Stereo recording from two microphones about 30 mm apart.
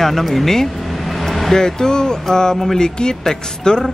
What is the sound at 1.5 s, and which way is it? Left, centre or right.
Music, left.